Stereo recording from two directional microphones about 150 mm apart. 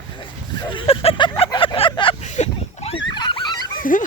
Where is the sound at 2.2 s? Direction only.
50° left (ahead or behind).